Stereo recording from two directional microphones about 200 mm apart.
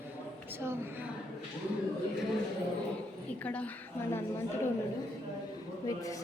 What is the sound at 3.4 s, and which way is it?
Speech, 5° left (ahead or behind).